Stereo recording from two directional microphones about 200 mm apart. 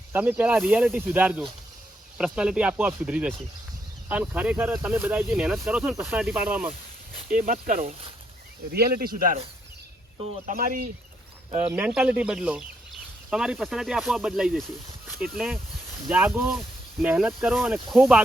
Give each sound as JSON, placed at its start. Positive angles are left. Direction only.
{"t": 0.1, "sound": "speech", "side_deg": -10}
{"t": 7.3, "sound": "speech", "side_deg": -45}
{"t": 10.4, "sound": "speech", "side_deg": -40}
{"t": 11.5, "sound": "speech", "side_deg": -10}